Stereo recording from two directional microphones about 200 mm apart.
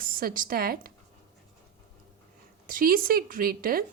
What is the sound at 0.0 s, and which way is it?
Speech, 45° right (ahead or behind).